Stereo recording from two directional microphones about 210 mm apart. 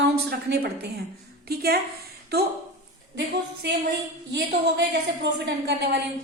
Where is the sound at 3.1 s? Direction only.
55° right (ahead or behind).